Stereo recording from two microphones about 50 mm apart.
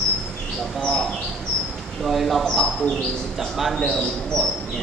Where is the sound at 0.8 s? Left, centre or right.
Centre.